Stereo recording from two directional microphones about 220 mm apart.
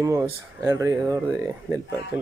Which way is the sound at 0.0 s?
15° right (ahead or behind).